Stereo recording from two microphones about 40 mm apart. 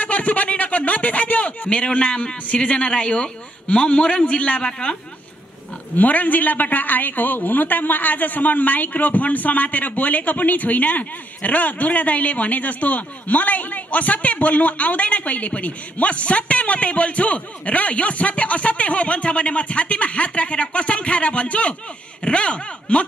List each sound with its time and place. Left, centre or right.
0.0 s a sound: left
2.9 s a man's voice: left
4.6 s a man's voice: left
5.9 s a man's voice: left